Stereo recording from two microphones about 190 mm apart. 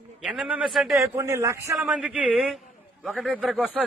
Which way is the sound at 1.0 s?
15° right (ahead or behind).